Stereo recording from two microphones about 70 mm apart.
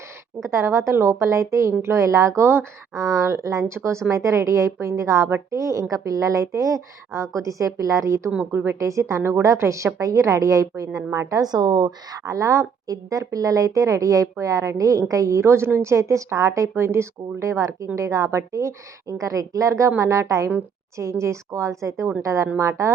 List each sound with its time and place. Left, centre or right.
0.4 s a woman's voice: right
8.5 s speech: right
8.8 s a woman's voice: right
11.4 s a woman's voice: right